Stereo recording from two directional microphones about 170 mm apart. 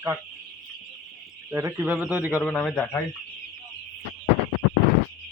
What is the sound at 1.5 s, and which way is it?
A man's voice, 15° right (ahead or behind).